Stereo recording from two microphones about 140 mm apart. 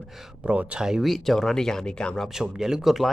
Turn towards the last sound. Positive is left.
turn(degrees=0)  # may be behind; listen again after turning